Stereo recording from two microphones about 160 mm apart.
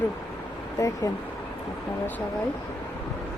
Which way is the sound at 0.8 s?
20° left (ahead or behind).